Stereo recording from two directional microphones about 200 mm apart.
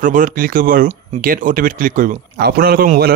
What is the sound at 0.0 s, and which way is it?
Speech, 40° right (ahead or behind).